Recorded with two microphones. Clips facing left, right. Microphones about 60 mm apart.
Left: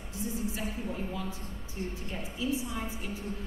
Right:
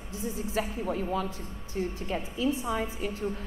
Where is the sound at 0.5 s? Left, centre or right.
Right.